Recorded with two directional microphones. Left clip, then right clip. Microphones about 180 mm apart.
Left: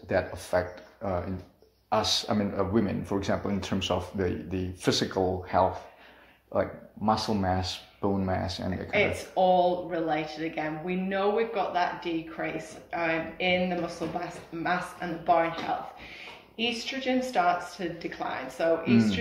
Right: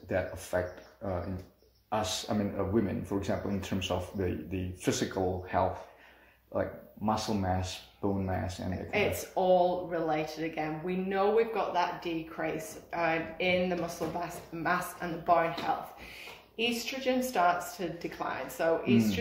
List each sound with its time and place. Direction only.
0.1 s speech: 20° left (ahead or behind)
8.9 s speech: 35° right (ahead or behind)
16.5 s speech: 40° right (ahead or behind)